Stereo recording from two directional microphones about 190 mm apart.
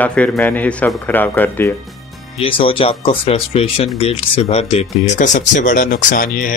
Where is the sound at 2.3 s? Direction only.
30° left (ahead or behind); by 6.5 s 45° left (ahead or behind).